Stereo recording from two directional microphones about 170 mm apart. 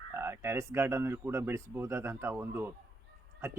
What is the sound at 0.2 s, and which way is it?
Speech, 15° right (ahead or behind).